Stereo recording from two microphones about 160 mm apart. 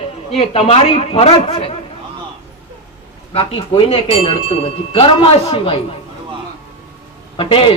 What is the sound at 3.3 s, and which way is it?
A man's voice, 35° left (ahead or behind).